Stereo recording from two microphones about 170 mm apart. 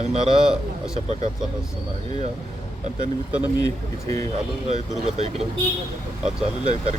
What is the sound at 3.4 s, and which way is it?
Speech, 20° left (ahead or behind).